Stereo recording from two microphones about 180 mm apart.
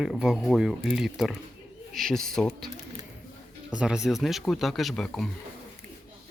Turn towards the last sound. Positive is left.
turn(degrees=0)  # may be behind; listen again after turning